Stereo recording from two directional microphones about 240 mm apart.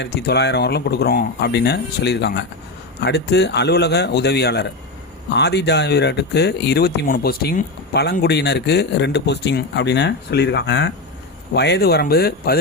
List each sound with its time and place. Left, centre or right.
0.0 s speech: left